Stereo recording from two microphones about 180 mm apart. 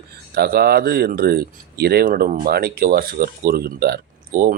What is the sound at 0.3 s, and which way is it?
Speech, 60° right (ahead or behind).